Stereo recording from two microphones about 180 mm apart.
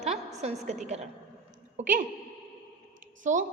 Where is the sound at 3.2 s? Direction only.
45° right (ahead or behind).